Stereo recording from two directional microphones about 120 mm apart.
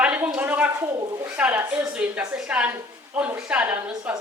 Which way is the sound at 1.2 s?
10° right (ahead or behind).